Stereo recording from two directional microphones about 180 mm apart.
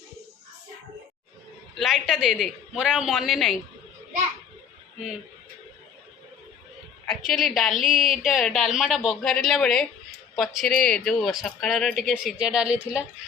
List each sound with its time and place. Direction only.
1.7 s a woman's voice: centre (ahead or behind)
7.1 s a woman's voice: centre (ahead or behind)
7.8 s speech: 45° left (ahead or behind)
8.1 s a woman's voice: centre (ahead or behind)